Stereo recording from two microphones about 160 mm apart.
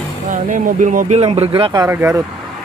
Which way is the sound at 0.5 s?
55° right (ahead or behind).